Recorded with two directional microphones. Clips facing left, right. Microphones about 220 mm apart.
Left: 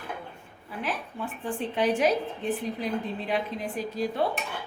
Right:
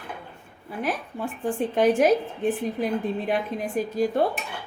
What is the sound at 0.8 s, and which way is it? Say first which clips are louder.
A woman's voice: right 4 dB; 45° right (ahead or behind).